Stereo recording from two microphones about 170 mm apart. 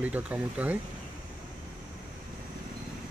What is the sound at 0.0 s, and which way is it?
Speech, 10° right (ahead or behind).